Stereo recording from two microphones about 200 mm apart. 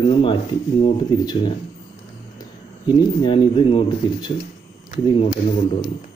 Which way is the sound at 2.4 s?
25° left (ahead or behind).